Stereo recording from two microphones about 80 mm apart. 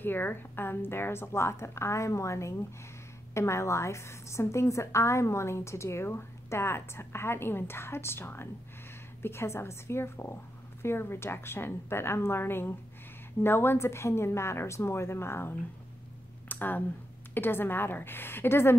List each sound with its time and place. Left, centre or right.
0.0 s a woman's voice: left
16.4 s a sound: left
17.3 s a woman's voice: left